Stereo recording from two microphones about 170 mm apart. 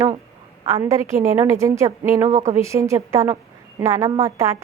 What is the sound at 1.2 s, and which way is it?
A woman's voice, 15° right (ahead or behind).